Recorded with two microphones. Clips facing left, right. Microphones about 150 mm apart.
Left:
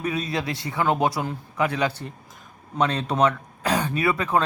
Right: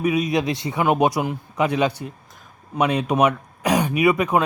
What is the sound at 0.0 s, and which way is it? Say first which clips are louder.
Speech: right 6 dB; 10° right (ahead or behind).